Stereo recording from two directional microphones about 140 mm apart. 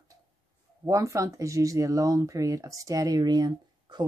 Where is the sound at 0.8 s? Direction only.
20° right (ahead or behind).